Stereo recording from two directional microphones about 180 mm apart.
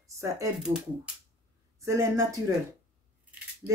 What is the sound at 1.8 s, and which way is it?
Speech, 15° right (ahead or behind).